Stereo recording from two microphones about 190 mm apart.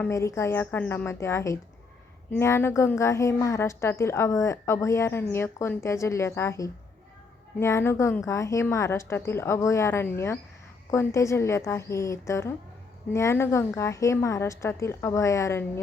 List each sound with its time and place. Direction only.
0.0 s a woman's voice: 15° left (ahead or behind)